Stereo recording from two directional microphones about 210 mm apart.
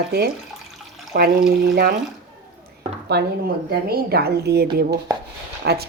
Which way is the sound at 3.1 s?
50° right (ahead or behind).